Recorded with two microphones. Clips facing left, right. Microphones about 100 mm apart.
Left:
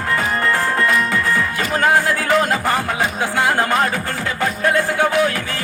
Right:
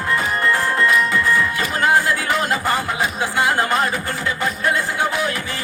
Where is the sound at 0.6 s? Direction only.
45° left (ahead or behind).